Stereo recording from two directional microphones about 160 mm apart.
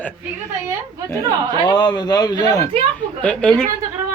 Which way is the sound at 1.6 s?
25° left (ahead or behind).